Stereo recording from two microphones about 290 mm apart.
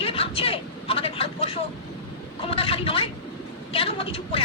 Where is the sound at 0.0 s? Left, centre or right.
Centre.